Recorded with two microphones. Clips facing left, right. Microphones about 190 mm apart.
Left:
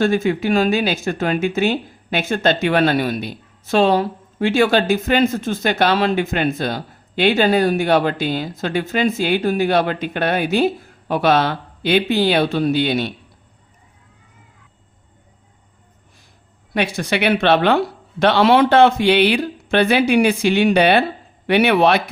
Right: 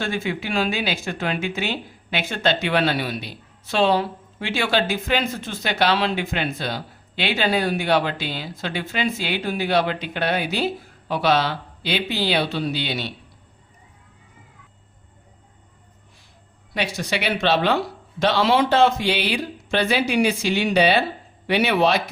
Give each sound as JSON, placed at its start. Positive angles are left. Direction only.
{"t": 0.0, "sound": "speech", "side_deg": 45}
{"t": 16.7, "sound": "speech", "side_deg": 55}